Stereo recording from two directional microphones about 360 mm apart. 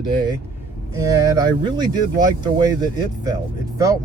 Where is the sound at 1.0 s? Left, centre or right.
Centre.